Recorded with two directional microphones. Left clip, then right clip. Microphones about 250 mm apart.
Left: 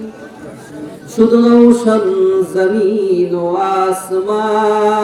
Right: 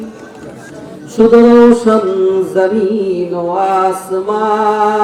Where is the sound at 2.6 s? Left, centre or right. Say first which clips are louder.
Right 3 dB; right.